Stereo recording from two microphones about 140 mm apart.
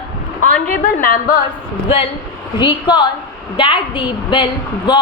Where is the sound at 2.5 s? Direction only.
30° left (ahead or behind).